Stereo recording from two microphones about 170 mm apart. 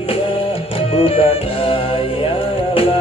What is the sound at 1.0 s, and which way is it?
Music, 35° left (ahead or behind).